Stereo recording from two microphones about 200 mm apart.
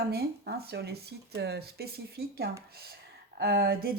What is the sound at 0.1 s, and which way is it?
Speech, 50° right (ahead or behind).